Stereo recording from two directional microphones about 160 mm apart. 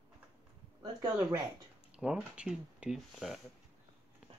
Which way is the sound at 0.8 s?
15° right (ahead or behind).